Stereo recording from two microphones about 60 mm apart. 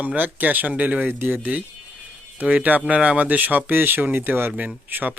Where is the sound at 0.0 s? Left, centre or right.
Right.